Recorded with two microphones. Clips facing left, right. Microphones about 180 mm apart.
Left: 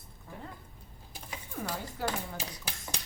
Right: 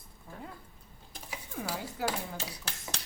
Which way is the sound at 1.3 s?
10° right (ahead or behind).